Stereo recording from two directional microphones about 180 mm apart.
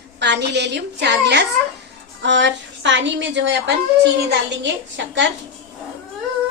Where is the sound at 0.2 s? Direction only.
70° right (ahead or behind).